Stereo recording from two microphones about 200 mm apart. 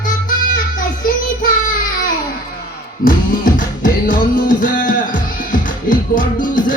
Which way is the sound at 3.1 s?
45° left (ahead or behind).